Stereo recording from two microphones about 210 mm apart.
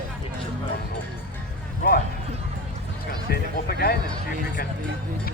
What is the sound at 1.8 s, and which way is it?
Run, 45° left (ahead or behind).